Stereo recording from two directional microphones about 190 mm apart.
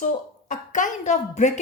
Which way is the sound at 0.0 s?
40° left (ahead or behind).